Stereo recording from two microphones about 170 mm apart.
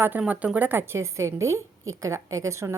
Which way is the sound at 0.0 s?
10° right (ahead or behind).